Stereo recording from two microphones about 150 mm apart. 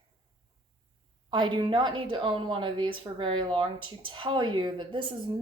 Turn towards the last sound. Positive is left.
turn(degrees=-35)  # may be behind; listen again after turning